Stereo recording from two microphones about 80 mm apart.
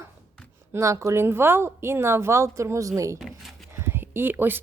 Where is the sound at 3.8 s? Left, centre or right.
Right.